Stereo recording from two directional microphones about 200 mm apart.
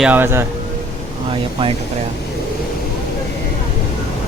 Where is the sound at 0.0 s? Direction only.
10° right (ahead or behind).